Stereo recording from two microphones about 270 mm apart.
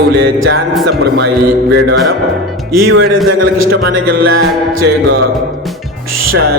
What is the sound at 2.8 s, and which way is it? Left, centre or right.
Music, right.